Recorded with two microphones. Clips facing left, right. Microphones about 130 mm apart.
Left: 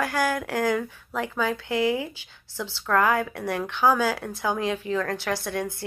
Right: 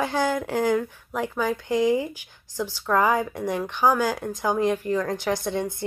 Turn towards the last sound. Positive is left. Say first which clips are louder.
# right 2 dB
turn(degrees=-20)  # may be behind; listen again after turning